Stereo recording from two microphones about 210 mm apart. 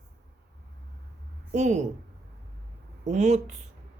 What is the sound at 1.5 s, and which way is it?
Speech, 35° right (ahead or behind).